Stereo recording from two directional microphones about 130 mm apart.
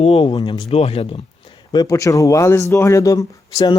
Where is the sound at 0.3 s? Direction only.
35° left (ahead or behind).